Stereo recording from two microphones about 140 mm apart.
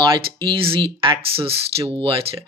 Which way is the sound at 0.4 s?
40° right (ahead or behind).